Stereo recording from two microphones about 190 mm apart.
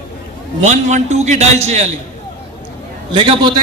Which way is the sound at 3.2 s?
25° right (ahead or behind).